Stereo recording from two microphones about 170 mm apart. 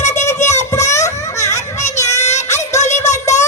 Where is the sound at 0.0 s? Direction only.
45° left (ahead or behind).